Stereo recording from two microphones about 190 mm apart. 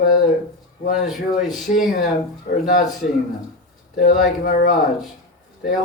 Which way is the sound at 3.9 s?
45° left (ahead or behind).